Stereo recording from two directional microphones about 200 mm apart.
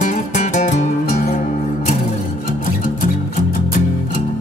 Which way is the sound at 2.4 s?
40° left (ahead or behind).